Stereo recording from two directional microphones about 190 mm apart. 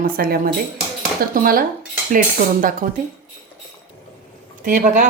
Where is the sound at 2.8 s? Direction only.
45° right (ahead or behind).